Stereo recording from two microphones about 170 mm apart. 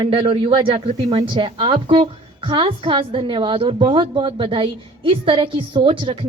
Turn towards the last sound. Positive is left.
turn(degrees=-30)  # may be behind; listen again after turning